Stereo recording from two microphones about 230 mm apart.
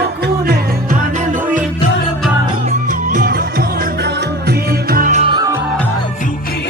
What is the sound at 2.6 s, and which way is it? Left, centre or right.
Music, right.